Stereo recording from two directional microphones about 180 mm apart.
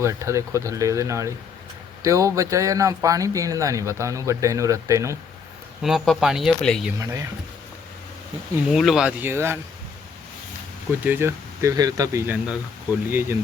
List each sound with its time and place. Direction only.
0.0 s speech: 15° right (ahead or behind)
5.8 s speech: centre (ahead or behind)
7.0 s speech: 20° right (ahead or behind)
8.6 s speech: centre (ahead or behind)
11.0 s speech: 10° right (ahead or behind)